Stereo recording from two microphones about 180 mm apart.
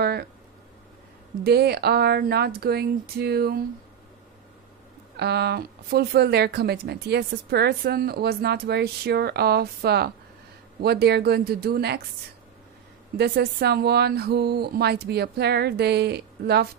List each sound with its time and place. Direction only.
0.0 s a sound: 60° right (ahead or behind)
1.4 s speech: 65° right (ahead or behind)
5.1 s speech: 65° right (ahead or behind)
13.2 s speech: 60° right (ahead or behind)